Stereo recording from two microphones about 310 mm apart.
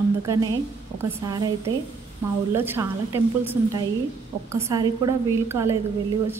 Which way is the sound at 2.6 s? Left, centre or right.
Centre.